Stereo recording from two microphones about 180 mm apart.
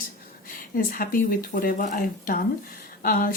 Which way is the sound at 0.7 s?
50° left (ahead or behind).